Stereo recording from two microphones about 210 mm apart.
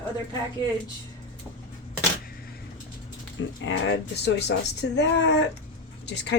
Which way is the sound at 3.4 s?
65° left (ahead or behind).